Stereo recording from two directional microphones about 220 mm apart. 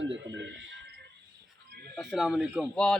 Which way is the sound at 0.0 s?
55° right (ahead or behind).